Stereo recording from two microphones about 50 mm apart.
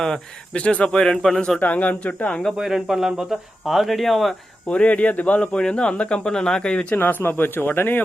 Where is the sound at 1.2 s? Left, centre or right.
Centre.